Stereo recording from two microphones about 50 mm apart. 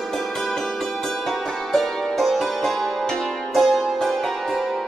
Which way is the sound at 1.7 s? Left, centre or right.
Centre.